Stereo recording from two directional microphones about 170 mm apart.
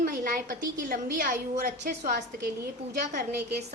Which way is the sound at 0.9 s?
55° right (ahead or behind).